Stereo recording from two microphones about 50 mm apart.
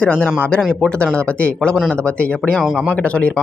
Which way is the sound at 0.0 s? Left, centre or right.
Left.